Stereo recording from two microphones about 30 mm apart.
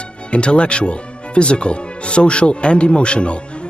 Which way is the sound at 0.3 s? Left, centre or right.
Left.